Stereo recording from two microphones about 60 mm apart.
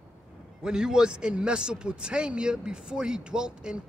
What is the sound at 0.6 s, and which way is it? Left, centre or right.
Speech, centre.